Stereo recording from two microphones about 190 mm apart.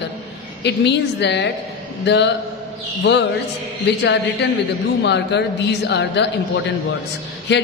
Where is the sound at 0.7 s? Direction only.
65° left (ahead or behind).